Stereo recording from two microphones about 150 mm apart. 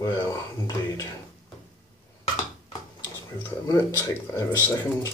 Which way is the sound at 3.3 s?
20° left (ahead or behind).